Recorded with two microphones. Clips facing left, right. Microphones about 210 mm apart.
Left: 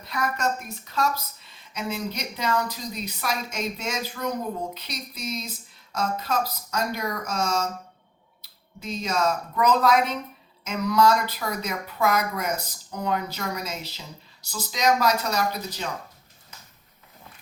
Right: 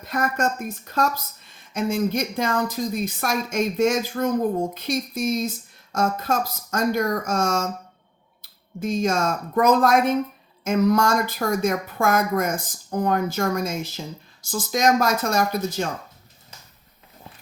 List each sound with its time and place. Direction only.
0.0 s speech: 50° right (ahead or behind)